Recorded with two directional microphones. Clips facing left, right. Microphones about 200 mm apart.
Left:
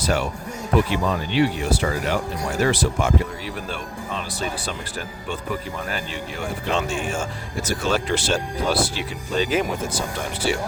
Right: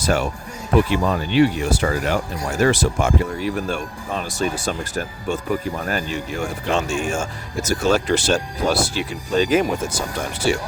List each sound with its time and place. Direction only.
0.0 s speech: 45° right (ahead or behind)